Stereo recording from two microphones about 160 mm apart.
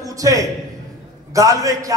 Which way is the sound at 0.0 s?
20° right (ahead or behind).